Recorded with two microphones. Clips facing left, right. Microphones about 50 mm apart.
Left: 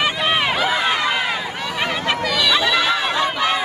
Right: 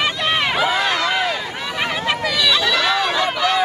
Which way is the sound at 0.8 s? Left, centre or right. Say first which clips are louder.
Even; centre.